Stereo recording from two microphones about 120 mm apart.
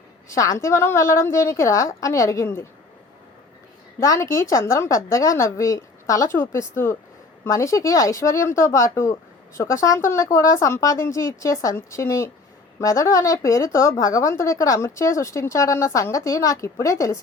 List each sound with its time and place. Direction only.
0.3 s a woman's voice: 25° left (ahead or behind)
4.0 s a woman's voice: 25° left (ahead or behind)